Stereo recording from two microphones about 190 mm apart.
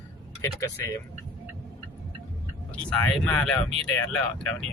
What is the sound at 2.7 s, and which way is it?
Speech, 5° left (ahead or behind).